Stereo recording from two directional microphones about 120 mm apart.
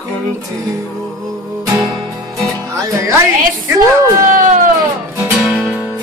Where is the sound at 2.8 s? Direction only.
25° right (ahead or behind).